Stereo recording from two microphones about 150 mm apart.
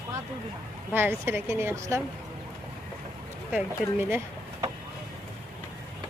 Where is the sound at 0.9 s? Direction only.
15° right (ahead or behind).